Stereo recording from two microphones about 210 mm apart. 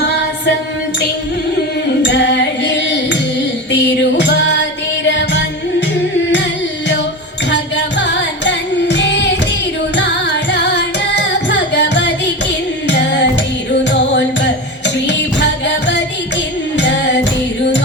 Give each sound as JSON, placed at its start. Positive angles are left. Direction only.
{"t": 0.0, "sound": "music", "side_deg": 50}
{"t": 2.0, "sound": "music", "side_deg": 55}
{"t": 7.5, "sound": "music", "side_deg": 60}
{"t": 9.9, "sound": "carnatic music", "side_deg": 55}
{"t": 12.9, "sound": "music", "side_deg": 55}